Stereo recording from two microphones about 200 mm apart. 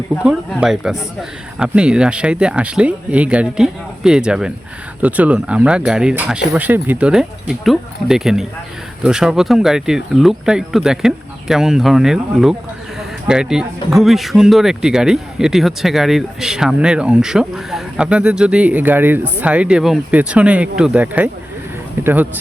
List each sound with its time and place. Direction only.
0.2 s speech: 5° right (ahead or behind)